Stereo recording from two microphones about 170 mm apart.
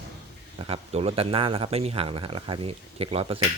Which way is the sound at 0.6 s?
35° right (ahead or behind).